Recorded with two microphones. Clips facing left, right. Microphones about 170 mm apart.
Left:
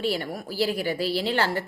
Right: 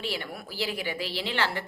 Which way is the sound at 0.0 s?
40° left (ahead or behind).